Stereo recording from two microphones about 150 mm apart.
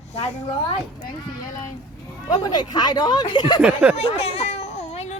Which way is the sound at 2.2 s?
25° left (ahead or behind).